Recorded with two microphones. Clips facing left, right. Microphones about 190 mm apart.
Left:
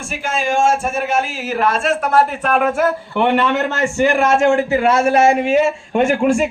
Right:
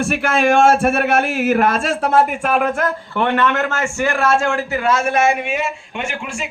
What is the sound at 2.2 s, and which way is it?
Speech, 10° right (ahead or behind).